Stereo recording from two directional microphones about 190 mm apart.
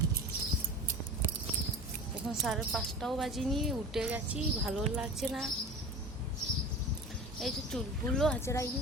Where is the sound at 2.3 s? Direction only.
Centre (ahead or behind).